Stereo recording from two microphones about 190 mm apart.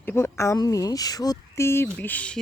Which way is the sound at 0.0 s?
10° left (ahead or behind).